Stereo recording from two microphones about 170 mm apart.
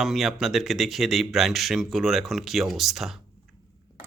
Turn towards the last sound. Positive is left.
turn(degrees=0)  # may be behind; listen again after turning